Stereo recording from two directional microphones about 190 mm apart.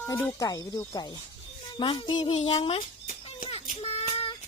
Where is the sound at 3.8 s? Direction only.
35° left (ahead or behind).